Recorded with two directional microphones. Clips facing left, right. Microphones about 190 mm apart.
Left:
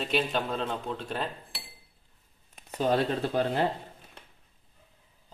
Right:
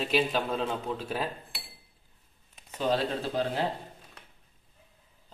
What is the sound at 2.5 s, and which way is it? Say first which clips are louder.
Speech: left 2 dB; 55° left (ahead or behind).